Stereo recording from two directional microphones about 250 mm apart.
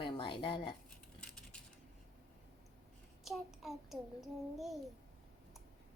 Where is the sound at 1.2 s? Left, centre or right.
Centre.